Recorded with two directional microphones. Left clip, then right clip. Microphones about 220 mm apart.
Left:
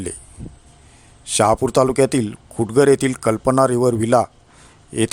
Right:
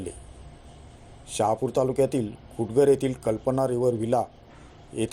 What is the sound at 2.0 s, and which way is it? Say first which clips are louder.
A man's voice: left 7 dB; 40° left (ahead or behind).